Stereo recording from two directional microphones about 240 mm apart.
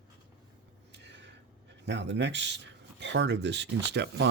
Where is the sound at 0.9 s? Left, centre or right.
Right.